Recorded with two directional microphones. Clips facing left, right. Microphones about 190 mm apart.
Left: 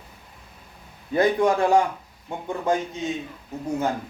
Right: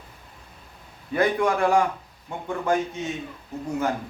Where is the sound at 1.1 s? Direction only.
25° left (ahead or behind).